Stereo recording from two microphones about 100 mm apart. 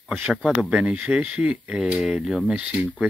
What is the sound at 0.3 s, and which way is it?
Speech, 5° right (ahead or behind).